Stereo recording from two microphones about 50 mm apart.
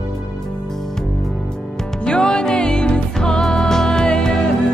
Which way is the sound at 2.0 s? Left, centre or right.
Centre.